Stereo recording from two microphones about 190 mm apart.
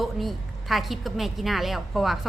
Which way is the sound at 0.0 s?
Centre (ahead or behind).